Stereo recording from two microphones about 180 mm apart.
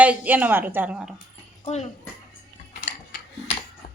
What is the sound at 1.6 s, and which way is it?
Speech, 40° left (ahead or behind).